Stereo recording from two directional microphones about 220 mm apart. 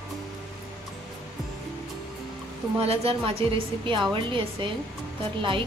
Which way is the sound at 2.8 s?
25° right (ahead or behind).